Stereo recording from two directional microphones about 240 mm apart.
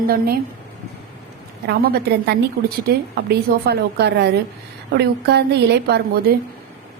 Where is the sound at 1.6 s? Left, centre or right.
Right.